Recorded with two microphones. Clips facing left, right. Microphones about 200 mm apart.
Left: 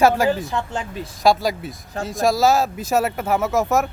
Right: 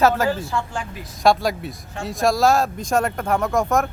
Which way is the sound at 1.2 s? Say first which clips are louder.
Even; centre (ahead or behind).